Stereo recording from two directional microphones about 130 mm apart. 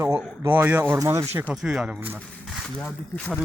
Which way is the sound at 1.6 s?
5° right (ahead or behind).